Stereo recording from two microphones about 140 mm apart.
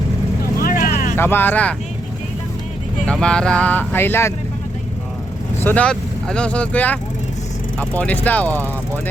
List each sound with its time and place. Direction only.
0.6 s vehicle: 85° left; by 1.1 s 60° left (ahead or behind)
1.1 s speech: 15° left (ahead or behind)
3.1 s speech: 5° left (ahead or behind)
5.5 s speech: 10° left (ahead or behind)